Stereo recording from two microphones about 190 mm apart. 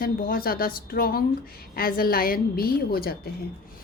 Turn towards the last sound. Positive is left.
turn(degrees=50)  # may be behind; listen again after turning